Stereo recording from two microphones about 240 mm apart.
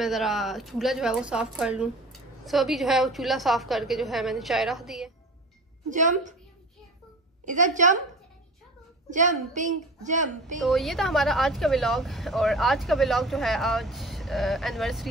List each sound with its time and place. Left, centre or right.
0.0 s speech: centre
5.9 s a woman's voice: right
7.4 s a woman's voice: right
9.1 s a woman's voice: right
10.6 s speech: centre